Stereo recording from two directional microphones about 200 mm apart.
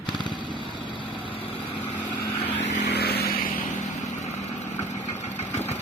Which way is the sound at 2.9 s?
55° left (ahead or behind).